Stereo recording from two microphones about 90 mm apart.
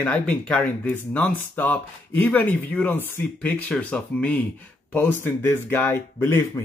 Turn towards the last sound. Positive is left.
turn(degrees=25)  # may be behind; listen again after turning